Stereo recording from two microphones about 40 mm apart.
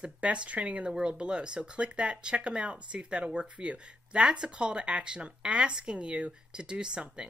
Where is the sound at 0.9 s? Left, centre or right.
Right.